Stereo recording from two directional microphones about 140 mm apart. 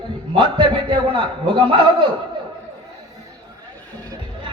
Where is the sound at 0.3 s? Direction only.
35° right (ahead or behind).